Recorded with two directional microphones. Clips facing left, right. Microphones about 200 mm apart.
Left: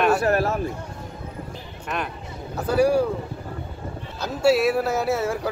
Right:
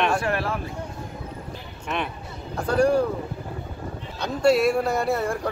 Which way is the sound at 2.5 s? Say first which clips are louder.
Left 1 dB; 5° left (ahead or behind).